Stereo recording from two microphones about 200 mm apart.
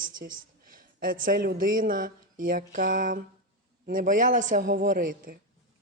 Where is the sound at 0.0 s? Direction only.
45° right (ahead or behind).